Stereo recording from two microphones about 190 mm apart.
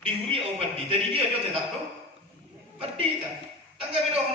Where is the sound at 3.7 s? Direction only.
30° right (ahead or behind).